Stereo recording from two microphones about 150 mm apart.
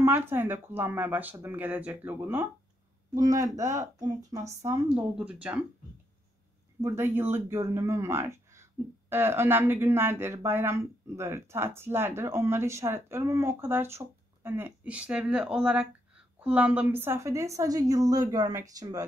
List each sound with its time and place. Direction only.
0.0 s a woman's voice: 15° right (ahead or behind)
4.8 s speech: 10° right (ahead or behind)
6.8 s a woman's voice: 20° right (ahead or behind)